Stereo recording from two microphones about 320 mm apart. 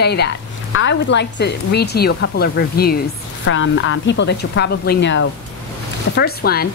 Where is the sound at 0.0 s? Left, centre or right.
Left.